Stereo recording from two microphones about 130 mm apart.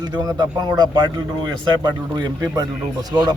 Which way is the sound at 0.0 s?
30° right (ahead or behind).